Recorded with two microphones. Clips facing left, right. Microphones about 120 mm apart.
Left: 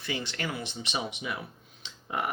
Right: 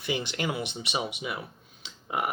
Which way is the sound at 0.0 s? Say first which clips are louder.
Right 4 dB; 15° right (ahead or behind).